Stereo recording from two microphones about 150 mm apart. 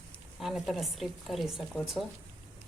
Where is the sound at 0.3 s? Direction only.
Centre (ahead or behind).